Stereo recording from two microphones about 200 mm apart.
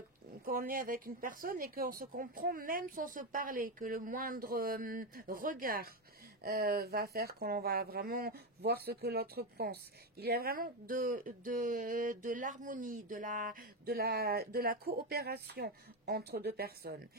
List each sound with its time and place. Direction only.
0.5 s speech: 45° right (ahead or behind)